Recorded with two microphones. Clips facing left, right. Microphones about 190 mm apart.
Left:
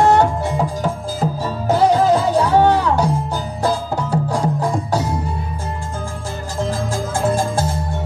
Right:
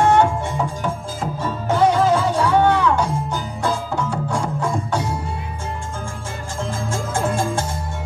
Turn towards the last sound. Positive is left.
turn(degrees=35)  # may be behind; listen again after turning